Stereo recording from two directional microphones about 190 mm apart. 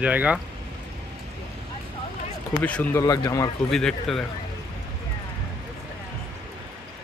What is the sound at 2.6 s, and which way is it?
Speech, 10° left (ahead or behind).